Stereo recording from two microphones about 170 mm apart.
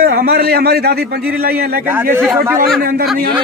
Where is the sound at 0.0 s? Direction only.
70° right (ahead or behind).